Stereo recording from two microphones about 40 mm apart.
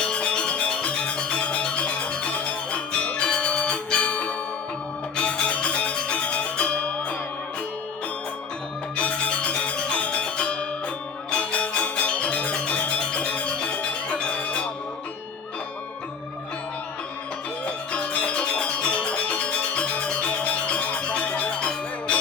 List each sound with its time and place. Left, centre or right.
0.0 s music: left
9.0 s music: left
17.7 s music: left